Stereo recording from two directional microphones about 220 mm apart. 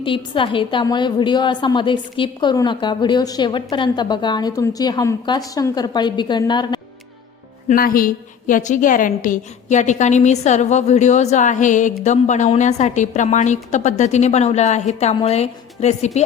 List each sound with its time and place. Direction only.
0.0 s a woman's voice: 25° left (ahead or behind)
7.7 s a woman's voice: 40° left (ahead or behind)